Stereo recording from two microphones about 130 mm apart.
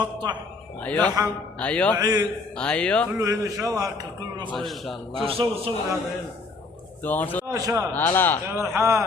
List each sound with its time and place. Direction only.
0.0 s a man's voice: 35° right (ahead or behind)
0.8 s speech: 10° left (ahead or behind)
1.0 s a man's voice: 25° right (ahead or behind)
1.5 s speech: 10° left (ahead or behind)
2.0 s a man's voice: 30° right (ahead or behind)
2.6 s speech: 10° left (ahead or behind)
3.1 s a man's voice: 25° right (ahead or behind)
4.4 s a man's voice: centre (ahead or behind)
5.2 s a man's voice: 45° right (ahead or behind)
7.0 s speech: 15° left (ahead or behind)
7.4 s a man's voice: 25° right (ahead or behind)
7.9 s speech: 15° left (ahead or behind)
8.4 s a man's voice: 20° right (ahead or behind)